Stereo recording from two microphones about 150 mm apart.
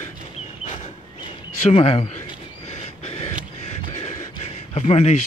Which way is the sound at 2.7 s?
45° left (ahead or behind).